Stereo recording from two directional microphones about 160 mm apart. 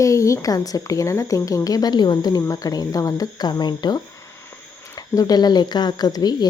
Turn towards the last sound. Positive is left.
turn(degrees=25)  # may be behind; listen again after turning